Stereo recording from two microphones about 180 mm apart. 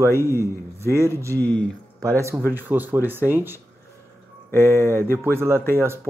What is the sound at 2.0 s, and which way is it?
Speech, 15° right (ahead or behind).